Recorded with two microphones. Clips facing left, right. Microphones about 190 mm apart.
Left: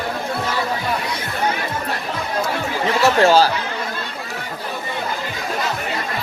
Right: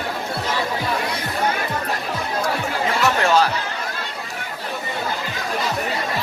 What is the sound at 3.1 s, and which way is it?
Chatter, 30° left (ahead or behind).